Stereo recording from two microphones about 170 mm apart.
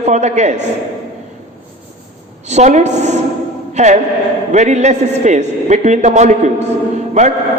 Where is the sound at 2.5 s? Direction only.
45° right (ahead or behind).